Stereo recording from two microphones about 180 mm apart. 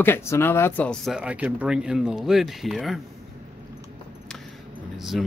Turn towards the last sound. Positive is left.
turn(degrees=0)  # may be behind; listen again after turning